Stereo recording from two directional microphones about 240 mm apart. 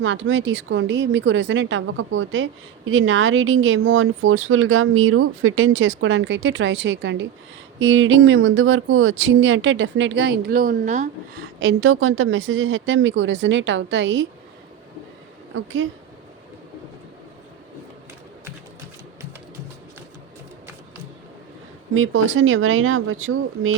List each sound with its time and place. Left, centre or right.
0.0 s a woman's voice: right
11.6 s a woman's voice: right
15.5 s a woman's voice: right
21.9 s speech: right